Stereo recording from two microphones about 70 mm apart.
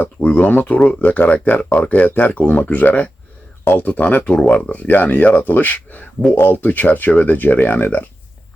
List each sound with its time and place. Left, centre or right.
0.0 s speech: left